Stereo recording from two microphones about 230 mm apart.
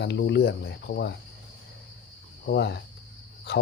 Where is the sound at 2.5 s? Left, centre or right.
Left.